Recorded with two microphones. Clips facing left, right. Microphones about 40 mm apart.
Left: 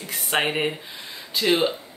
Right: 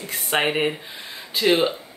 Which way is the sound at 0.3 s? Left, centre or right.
Centre.